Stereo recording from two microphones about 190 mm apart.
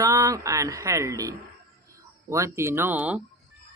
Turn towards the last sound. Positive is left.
turn(degrees=-10)  # may be behind; listen again after turning